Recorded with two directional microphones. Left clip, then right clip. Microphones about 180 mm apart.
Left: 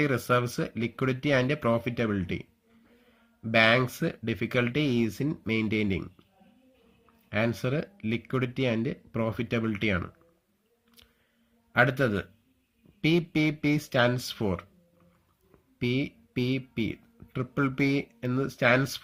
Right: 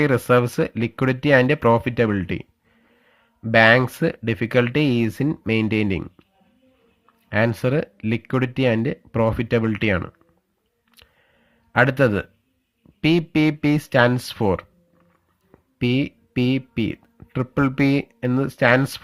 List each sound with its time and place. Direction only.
0.0 s speech: 50° right (ahead or behind)
7.3 s speech: 50° right (ahead or behind)
11.7 s speech: 50° right (ahead or behind)